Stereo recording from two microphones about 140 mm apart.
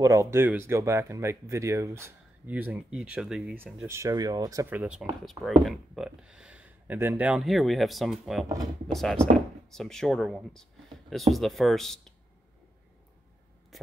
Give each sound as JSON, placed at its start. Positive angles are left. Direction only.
{"t": 0.0, "sound": "speech", "side_deg": -20}
{"t": 3.5, "sound": "speech", "side_deg": -15}
{"t": 4.6, "sound": "speech", "side_deg": -10}
{"t": 5.2, "sound": "speech", "side_deg": 0}